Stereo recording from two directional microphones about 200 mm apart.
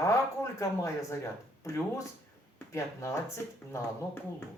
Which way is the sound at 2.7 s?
15° left (ahead or behind).